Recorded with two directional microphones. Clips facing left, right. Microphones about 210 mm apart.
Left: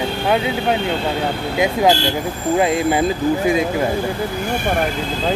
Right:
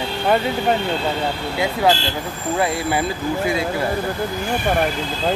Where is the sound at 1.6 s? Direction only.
15° left (ahead or behind).